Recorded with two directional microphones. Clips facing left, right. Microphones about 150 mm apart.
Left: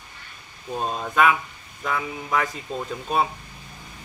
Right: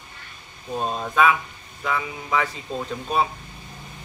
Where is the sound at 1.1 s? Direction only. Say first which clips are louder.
Even; centre (ahead or behind).